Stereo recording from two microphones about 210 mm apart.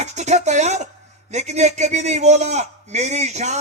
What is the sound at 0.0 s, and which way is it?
A man's voice, 35° right (ahead or behind).